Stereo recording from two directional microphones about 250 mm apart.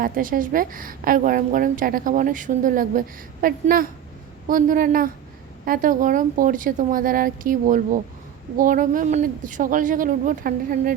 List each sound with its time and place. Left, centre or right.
0.0 s a woman's voice: right